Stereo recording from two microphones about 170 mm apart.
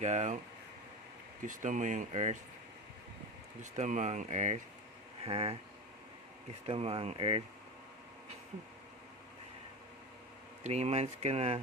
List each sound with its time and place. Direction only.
0.0 s speech: 45° right (ahead or behind)
1.4 s speech: 50° right (ahead or behind)
3.6 s speech: 45° right (ahead or behind)
6.7 s speech: 35° right (ahead or behind)
10.6 s speech: 40° right (ahead or behind)